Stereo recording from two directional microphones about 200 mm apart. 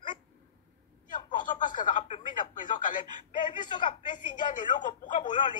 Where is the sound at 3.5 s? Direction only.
25° left (ahead or behind).